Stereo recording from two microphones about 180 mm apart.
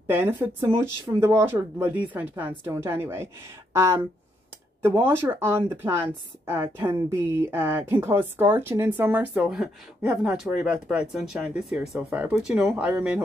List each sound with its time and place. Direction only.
0.0 s speech: 10° right (ahead or behind)